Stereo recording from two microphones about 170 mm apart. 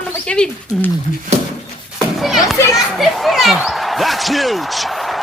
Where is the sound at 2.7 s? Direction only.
Centre (ahead or behind).